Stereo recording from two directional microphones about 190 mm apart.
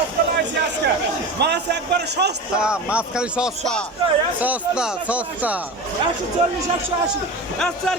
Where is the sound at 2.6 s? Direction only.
5° right (ahead or behind).